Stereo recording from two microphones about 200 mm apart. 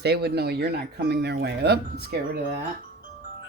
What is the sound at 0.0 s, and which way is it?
Speech, 55° right (ahead or behind).